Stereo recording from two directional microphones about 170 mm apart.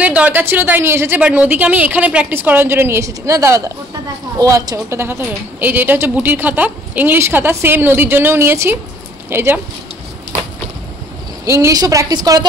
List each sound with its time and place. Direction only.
0.0 s speech: 10° right (ahead or behind)
11.4 s a woman's voice: 15° right (ahead or behind)